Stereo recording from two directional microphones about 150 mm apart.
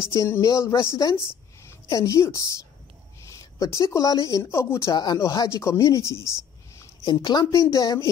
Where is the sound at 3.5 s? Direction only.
20° left (ahead or behind).